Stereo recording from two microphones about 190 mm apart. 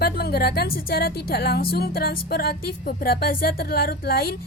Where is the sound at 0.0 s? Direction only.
55° left (ahead or behind).